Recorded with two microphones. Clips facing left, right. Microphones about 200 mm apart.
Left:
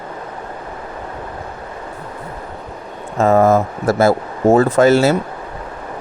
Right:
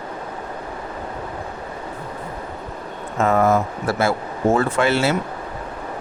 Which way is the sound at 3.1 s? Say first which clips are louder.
Left 5 dB; 40° left (ahead or behind).